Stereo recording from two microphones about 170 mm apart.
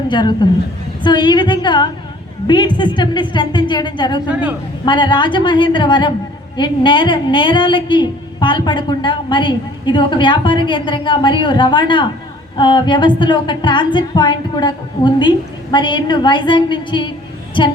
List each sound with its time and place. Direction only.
0.1 s a woman's voice: 25° left (ahead or behind)